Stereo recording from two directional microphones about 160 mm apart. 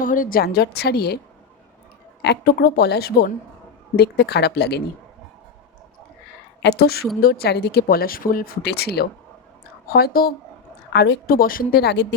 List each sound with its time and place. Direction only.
0.0 s a woman's voice: 60° left (ahead or behind); by 1.2 s 85° left
2.2 s a woman's voice: 85° left
3.9 s speech: 90° left
6.6 s a woman's voice: 85° left
9.9 s speech: 70° left (ahead or behind)
10.9 s a woman's voice: 90° left